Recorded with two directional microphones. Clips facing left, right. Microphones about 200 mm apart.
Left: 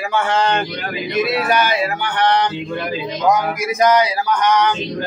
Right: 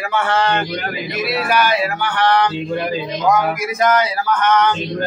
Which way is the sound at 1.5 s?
20° left (ahead or behind).